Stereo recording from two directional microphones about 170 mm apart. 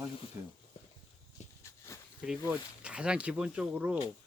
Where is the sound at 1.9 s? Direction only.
15° left (ahead or behind).